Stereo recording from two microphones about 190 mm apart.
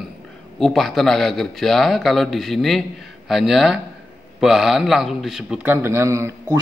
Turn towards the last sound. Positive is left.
turn(degrees=-15)  # may be behind; listen again after turning